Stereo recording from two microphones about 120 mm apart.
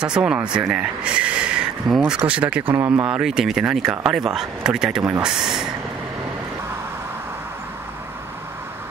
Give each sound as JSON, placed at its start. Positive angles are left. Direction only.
{"t": 0.0, "sound": "speech", "side_deg": -5}
{"t": 2.7, "sound": "speech", "side_deg": -20}
{"t": 3.1, "sound": "speech", "side_deg": -5}